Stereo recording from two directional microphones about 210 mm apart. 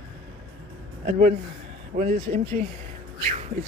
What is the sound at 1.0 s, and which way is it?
Speech, 35° right (ahead or behind).